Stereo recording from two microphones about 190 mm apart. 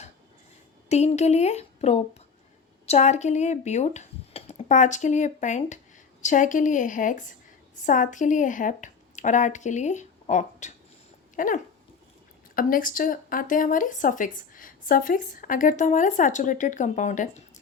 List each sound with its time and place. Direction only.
0.9 s speech: 35° left (ahead or behind)
11.3 s dog: 45° left (ahead or behind)
12.5 s speech: 45° left (ahead or behind)